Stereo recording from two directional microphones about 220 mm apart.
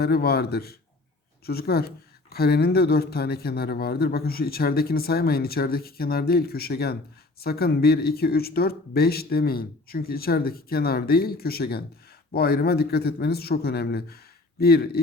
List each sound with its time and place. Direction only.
0.0 s speech: 45° left (ahead or behind)